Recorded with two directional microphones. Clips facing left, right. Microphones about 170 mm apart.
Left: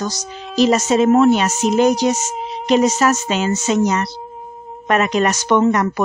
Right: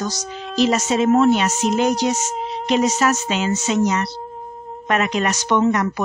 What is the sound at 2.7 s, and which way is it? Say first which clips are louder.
Speech: left 3 dB; 40° left (ahead or behind).